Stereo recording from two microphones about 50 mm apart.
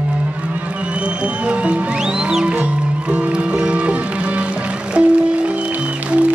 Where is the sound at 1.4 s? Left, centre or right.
Right.